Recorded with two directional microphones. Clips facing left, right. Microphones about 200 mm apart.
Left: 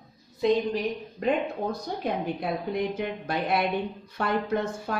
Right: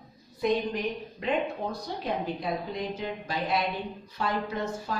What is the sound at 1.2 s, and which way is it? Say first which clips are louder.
Speech: left 3 dB; 45° left (ahead or behind).